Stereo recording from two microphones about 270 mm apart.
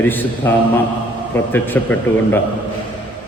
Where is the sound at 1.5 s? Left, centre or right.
Centre.